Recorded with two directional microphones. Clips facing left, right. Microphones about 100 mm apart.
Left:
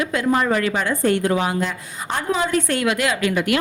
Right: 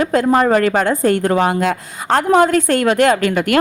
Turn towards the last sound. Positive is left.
turn(degrees=-50)  # may be behind; listen again after turning